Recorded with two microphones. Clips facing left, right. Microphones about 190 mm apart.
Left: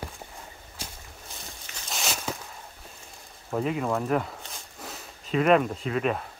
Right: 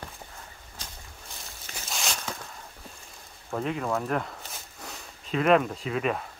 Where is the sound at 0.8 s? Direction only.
10° left (ahead or behind).